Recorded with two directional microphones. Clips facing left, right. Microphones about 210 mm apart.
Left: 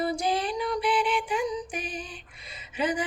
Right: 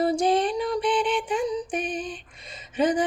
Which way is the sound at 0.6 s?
30° right (ahead or behind).